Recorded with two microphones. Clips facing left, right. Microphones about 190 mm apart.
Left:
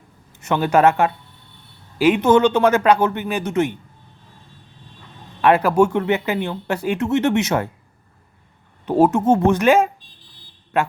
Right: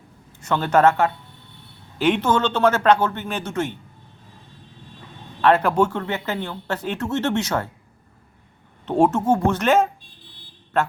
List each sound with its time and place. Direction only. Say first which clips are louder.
0.4 s speech: left 2 dB; 15° left (ahead or behind)
5.4 s speech: left 3 dB; 10° left (ahead or behind)
8.9 s speech: left 3 dB; 10° left (ahead or behind)